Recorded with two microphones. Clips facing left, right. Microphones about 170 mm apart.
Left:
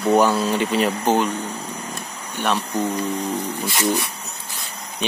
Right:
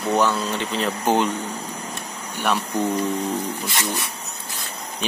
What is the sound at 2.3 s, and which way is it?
Speech, 10° right (ahead or behind).